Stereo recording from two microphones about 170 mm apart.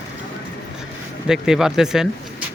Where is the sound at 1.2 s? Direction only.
5° right (ahead or behind).